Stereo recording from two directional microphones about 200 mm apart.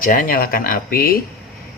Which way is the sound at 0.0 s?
45° left (ahead or behind).